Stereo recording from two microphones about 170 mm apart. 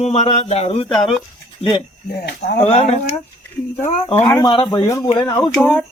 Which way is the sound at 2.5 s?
40° left (ahead or behind).